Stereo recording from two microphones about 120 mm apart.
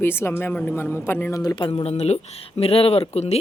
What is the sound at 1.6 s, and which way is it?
Speech, 55° left (ahead or behind).